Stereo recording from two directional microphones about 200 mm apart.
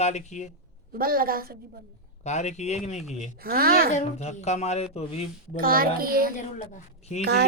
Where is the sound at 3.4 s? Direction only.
50° right (ahead or behind).